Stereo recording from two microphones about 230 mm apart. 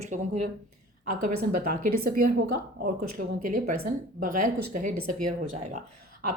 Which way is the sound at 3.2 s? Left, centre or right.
Right.